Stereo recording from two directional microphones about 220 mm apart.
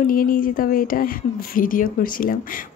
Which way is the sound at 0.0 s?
40° left (ahead or behind).